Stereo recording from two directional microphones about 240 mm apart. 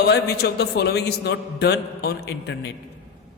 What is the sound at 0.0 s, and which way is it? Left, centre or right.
A man's voice, left.